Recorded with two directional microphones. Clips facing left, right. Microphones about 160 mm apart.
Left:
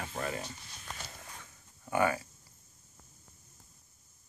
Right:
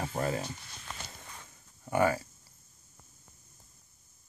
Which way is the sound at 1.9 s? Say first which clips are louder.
Right 2 dB; 30° right (ahead or behind).